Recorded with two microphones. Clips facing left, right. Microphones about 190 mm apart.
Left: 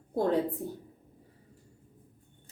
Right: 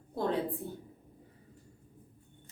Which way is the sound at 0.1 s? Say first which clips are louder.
Left 5 dB; 45° left (ahead or behind).